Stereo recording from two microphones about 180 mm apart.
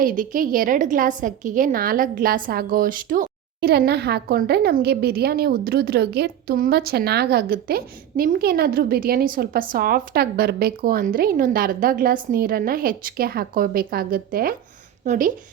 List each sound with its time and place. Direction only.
0.0 s a woman's voice: 50° right (ahead or behind)
15.0 s speech: 45° right (ahead or behind)